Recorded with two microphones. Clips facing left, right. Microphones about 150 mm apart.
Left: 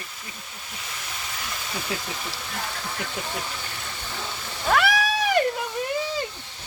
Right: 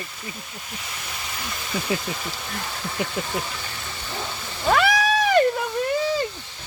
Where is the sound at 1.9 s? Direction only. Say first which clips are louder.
Right 6 dB; centre (ahead or behind).